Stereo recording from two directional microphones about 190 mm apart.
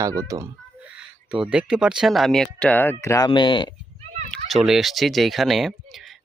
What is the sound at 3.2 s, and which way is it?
Speech, 25° left (ahead or behind).